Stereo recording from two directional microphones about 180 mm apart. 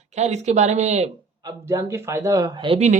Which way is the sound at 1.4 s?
20° right (ahead or behind).